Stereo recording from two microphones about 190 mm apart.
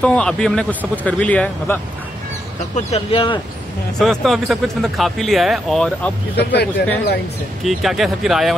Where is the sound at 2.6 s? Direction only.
35° left (ahead or behind).